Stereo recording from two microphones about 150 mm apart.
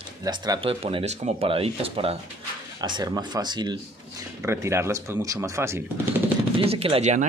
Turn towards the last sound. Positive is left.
turn(degrees=-50)  # may be behind; listen again after turning